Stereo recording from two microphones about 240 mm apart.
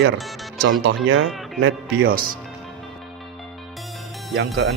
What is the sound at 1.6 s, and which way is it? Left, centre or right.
Speech, right.